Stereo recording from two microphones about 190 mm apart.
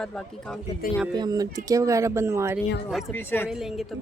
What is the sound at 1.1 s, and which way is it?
Speech, 20° right (ahead or behind).